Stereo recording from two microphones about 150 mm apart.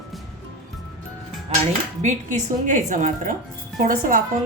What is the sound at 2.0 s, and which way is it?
A woman's voice, 55° right (ahead or behind).